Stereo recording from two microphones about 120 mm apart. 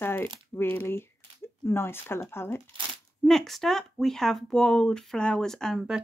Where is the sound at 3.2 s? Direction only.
Centre (ahead or behind).